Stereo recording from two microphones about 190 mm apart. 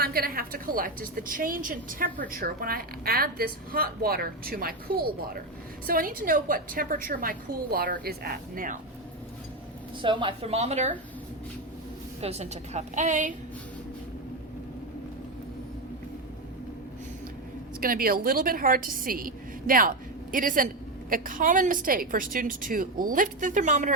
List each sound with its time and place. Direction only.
0.0 s a woman's voice: 50° right (ahead or behind)
10.0 s a woman's voice: 25° right (ahead or behind)
12.2 s a woman's voice: 35° right (ahead or behind)
17.7 s a woman's voice: 50° right (ahead or behind)